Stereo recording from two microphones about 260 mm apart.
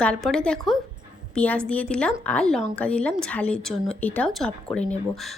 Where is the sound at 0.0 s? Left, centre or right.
Centre.